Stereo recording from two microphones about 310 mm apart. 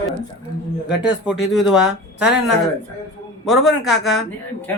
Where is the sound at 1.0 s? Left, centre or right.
Centre.